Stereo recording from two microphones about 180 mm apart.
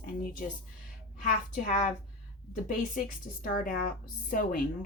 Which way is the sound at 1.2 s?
50° left (ahead or behind).